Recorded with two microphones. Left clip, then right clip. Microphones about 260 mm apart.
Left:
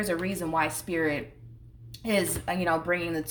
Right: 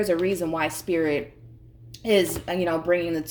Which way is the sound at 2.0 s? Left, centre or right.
Left.